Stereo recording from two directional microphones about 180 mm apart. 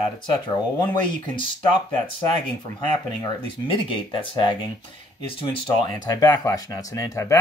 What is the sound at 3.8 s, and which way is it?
Speech, 30° left (ahead or behind).